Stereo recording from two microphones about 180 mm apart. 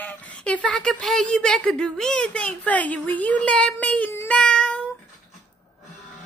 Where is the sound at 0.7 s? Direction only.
5° left (ahead or behind).